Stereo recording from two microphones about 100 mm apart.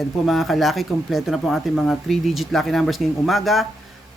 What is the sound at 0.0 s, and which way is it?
Speech, centre (ahead or behind).